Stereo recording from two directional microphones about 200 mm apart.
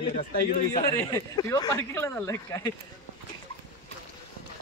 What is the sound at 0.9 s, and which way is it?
Speech, 15° left (ahead or behind).